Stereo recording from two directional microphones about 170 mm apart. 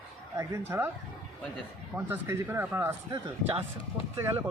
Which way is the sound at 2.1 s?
15° right (ahead or behind).